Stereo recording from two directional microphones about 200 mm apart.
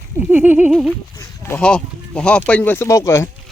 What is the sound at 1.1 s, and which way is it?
Speech, 15° left (ahead or behind).